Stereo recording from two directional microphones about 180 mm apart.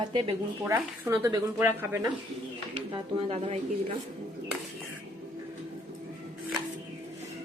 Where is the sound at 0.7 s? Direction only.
15° right (ahead or behind).